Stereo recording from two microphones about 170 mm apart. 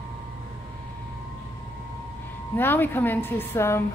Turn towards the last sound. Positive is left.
turn(degrees=15)  # may be behind; listen again after turning